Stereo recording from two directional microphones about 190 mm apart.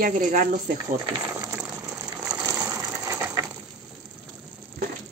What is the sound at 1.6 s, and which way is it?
Ratchet, 5° right (ahead or behind).